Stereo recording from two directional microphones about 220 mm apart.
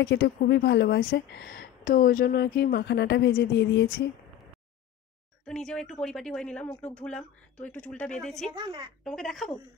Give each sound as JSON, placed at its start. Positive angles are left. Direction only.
{"t": 0.0, "sound": "speech", "side_deg": 50}
{"t": 5.5, "sound": "a woman's voice", "side_deg": 5}
{"t": 8.5, "sound": "a woman's voice", "side_deg": -25}
{"t": 9.0, "sound": "a woman's voice", "side_deg": 0}